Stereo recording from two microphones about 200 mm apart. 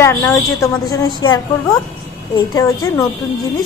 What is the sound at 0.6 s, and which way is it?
A woman's voice, 20° left (ahead or behind).